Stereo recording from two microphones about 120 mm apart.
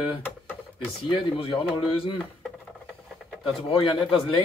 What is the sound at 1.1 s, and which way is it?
Speech, 50° left (ahead or behind).